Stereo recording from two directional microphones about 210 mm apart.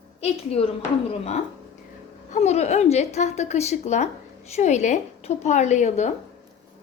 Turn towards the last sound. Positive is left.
turn(degrees=35)  # may be behind; listen again after turning